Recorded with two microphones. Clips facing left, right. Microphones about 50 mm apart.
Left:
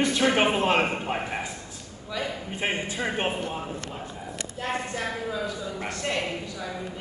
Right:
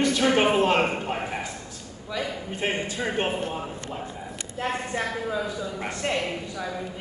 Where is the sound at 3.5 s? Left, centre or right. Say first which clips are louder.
Right 1 dB; centre.